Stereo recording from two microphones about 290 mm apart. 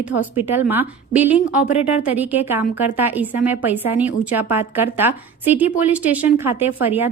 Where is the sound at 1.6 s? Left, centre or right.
Left.